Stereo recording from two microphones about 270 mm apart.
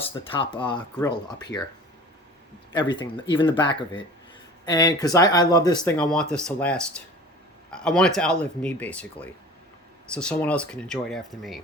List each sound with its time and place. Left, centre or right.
0.0 s speech: centre
2.7 s speech: centre
6.0 s speech: centre